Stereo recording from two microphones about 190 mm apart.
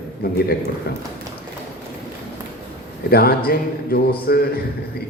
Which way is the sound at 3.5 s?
55° left (ahead or behind).